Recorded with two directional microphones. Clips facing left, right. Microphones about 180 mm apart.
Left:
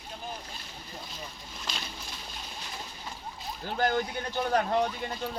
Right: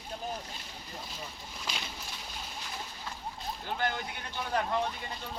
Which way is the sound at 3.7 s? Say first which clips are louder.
Left 7 dB; 40° left (ahead or behind).